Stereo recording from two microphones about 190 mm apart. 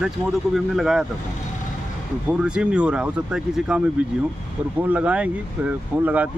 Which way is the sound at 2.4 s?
5° right (ahead or behind).